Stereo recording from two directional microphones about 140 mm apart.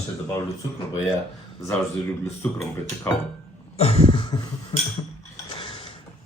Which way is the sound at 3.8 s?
45° left (ahead or behind).